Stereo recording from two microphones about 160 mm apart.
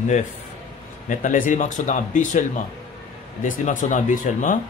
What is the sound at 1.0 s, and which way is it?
Speech, 55° left (ahead or behind).